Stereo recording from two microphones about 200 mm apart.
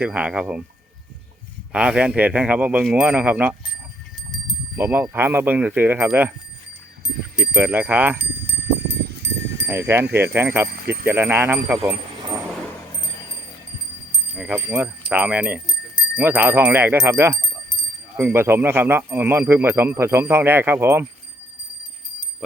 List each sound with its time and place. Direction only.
0.0 s speech: 5° right (ahead or behind)
1.7 s speech: 5° right (ahead or behind)
4.8 s speech: 10° right (ahead or behind)
7.5 s speech: 10° right (ahead or behind)
8.6 s sheep: 55° right (ahead or behind)
9.6 s speech: 10° right (ahead or behind)
10.7 s speech: 50° right (ahead or behind)
11.0 s speech: 10° right (ahead or behind)
11.9 s a sound: 10° right (ahead or behind)
14.3 s speech: 5° right (ahead or behind)
17.3 s a sound: 5° left (ahead or behind)
18.2 s speech: 10° right (ahead or behind)